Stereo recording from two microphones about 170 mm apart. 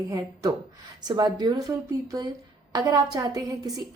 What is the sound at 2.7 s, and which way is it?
A woman's voice, 25° right (ahead or behind).